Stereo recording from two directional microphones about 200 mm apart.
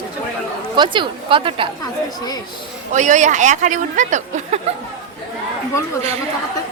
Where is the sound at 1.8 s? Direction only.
20° left (ahead or behind).